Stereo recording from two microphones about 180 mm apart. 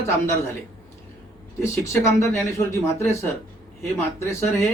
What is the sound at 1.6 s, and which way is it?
Speech, 15° left (ahead or behind).